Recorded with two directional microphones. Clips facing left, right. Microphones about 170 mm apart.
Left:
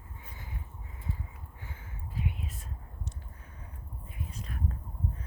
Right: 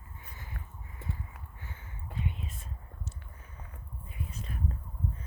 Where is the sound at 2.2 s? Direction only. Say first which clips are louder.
Left 1 dB; 5° left (ahead or behind).